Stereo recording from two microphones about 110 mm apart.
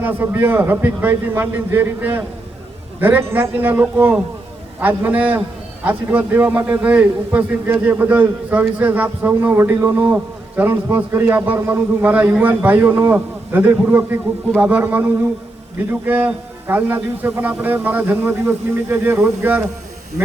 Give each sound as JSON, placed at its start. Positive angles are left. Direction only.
{"t": 0.0, "sound": "a man's voice", "side_deg": -20}
{"t": 16.0, "sound": "a man's voice", "side_deg": -20}